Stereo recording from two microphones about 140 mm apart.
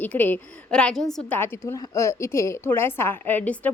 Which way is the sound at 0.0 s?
10° left (ahead or behind).